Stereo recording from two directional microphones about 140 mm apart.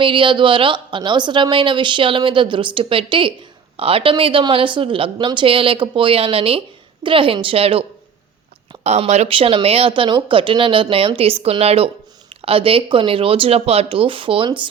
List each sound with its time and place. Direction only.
0.0 s a woman's voice: 35° right (ahead or behind)